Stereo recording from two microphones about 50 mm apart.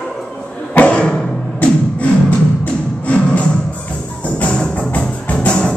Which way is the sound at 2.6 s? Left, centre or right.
Left.